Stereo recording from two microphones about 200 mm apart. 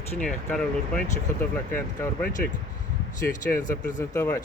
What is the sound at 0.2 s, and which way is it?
Speech, 5° left (ahead or behind).